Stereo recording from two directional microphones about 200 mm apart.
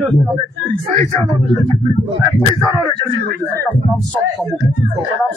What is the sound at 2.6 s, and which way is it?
Speech, 20° left (ahead or behind).